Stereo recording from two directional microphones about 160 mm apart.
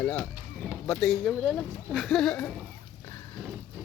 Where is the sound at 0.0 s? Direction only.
5° left (ahead or behind).